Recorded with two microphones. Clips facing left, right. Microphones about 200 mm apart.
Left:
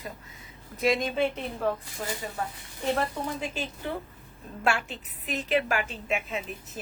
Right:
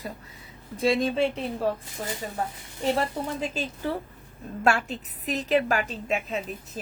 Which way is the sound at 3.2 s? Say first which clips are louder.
Right 2 dB; 35° right (ahead or behind).